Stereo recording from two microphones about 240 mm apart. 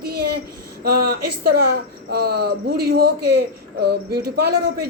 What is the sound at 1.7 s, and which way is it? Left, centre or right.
Speech, right.